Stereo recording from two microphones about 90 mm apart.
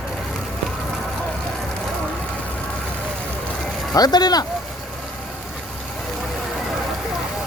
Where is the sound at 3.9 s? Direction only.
50° left (ahead or behind).